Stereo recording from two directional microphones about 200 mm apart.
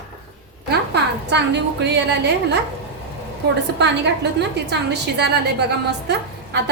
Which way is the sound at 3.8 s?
60° right (ahead or behind).